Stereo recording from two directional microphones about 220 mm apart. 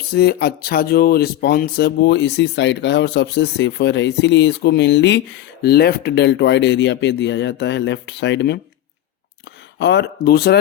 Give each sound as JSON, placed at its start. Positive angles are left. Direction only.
{"t": 0.1, "sound": "speech", "side_deg": 45}
{"t": 9.7, "sound": "speech", "side_deg": 55}